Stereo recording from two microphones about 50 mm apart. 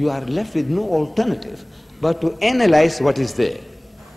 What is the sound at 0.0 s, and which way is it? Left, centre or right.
A man's voice, centre.